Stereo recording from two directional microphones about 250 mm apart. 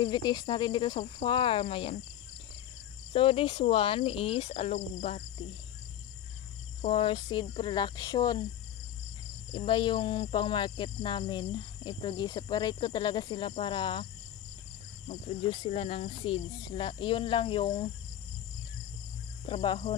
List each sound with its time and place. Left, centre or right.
0.0 s cricket: centre
3.1 s cricket: left
6.8 s cricket: left
9.5 s cricket: centre
15.0 s cricket: left
19.5 s cricket: left